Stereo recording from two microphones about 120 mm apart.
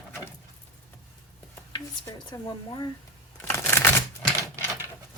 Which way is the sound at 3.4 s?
20° left (ahead or behind).